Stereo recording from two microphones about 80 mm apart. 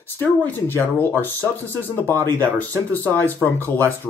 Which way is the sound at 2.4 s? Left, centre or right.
Centre.